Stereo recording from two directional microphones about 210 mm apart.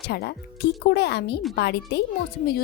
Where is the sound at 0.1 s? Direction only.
50° left (ahead or behind).